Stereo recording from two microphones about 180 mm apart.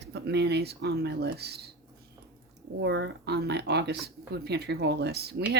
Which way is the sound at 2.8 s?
70° right (ahead or behind).